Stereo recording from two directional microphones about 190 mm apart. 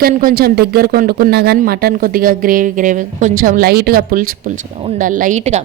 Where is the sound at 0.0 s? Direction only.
50° right (ahead or behind).